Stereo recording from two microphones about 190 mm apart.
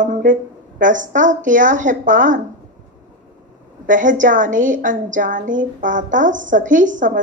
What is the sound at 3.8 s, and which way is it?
A woman's voice, 45° right (ahead or behind).